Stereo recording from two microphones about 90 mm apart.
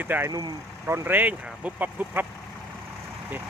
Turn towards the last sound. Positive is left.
turn(degrees=-20)  # may be behind; listen again after turning